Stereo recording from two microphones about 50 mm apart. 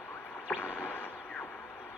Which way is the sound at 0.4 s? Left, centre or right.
Left.